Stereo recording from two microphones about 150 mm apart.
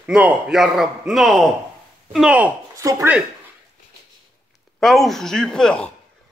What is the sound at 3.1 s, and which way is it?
Speech, 10° right (ahead or behind).